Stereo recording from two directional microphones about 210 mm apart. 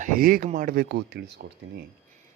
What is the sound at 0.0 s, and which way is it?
Speech, 40° right (ahead or behind).